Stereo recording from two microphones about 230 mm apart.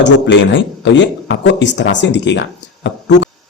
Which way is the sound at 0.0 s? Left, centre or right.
Left.